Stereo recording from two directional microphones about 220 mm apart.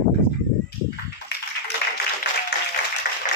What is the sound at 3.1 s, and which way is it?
Applause, 45° left (ahead or behind).